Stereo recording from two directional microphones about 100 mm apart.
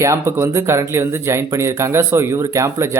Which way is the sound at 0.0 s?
25° right (ahead or behind).